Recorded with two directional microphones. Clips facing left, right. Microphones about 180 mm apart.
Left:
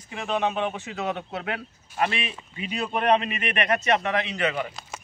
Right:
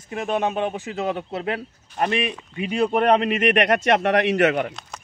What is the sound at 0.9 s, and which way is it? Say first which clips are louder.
Speech: right 4 dB; 35° right (ahead or behind).